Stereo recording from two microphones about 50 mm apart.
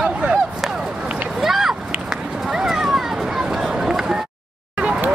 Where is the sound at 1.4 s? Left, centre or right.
Centre.